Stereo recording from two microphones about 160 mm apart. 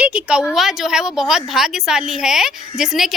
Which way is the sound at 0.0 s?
10° right (ahead or behind).